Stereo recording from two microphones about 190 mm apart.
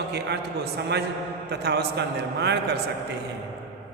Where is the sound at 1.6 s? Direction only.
60° right (ahead or behind).